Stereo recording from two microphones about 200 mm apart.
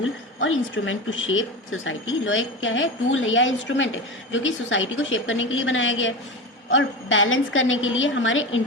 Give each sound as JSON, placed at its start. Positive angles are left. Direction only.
{"t": 0.0, "sound": "a woman's voice", "side_deg": 80}